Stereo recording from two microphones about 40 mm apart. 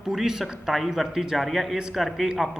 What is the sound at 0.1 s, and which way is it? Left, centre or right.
Speech, centre.